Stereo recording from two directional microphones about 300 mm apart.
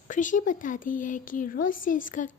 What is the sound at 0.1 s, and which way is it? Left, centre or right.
Speech, left.